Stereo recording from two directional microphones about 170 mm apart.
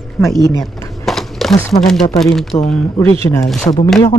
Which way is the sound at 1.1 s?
Centre (ahead or behind).